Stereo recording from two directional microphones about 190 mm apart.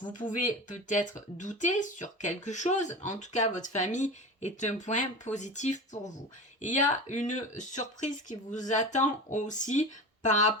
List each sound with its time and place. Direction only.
0.1 s speech: 40° left (ahead or behind)